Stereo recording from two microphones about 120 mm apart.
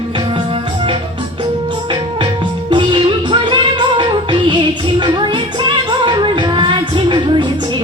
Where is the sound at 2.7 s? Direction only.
45° right (ahead or behind).